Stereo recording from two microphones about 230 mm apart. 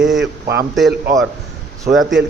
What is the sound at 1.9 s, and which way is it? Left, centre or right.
Speech, centre.